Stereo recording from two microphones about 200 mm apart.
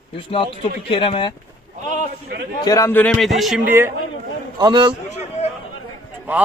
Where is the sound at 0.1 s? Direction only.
25° left (ahead or behind).